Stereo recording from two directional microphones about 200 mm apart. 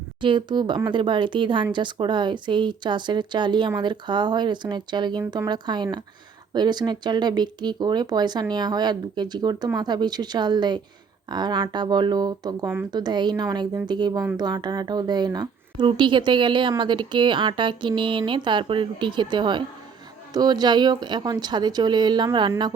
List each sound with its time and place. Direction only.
0.2 s speech: 25° right (ahead or behind)
12.9 s speech: 20° right (ahead or behind)